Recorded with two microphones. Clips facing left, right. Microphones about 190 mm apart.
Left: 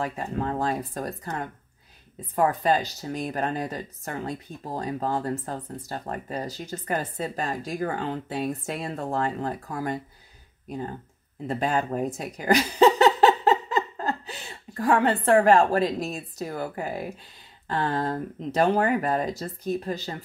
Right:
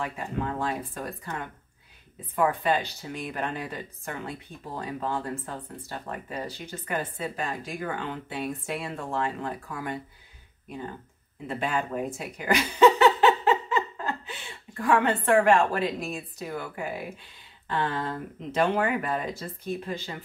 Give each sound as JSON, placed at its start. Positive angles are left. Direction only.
{"t": 0.0, "sound": "speech", "side_deg": 35}
{"t": 11.4, "sound": "speech", "side_deg": 40}